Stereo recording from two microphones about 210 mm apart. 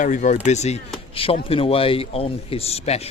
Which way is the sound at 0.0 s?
35° left (ahead or behind).